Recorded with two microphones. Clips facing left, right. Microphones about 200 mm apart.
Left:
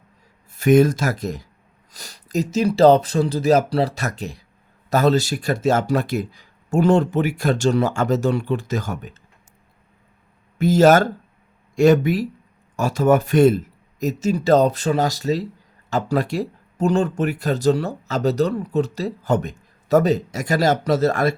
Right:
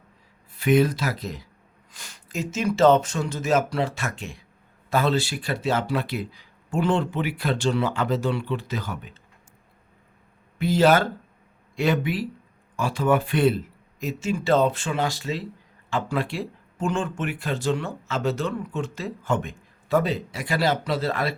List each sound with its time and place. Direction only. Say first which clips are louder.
0.5 s speech: left 5 dB; 45° left (ahead or behind)
10.6 s speech: left 5 dB; 45° left (ahead or behind)